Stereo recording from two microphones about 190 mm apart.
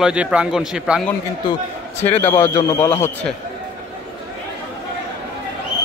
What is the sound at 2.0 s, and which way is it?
Speech, 10° left (ahead or behind).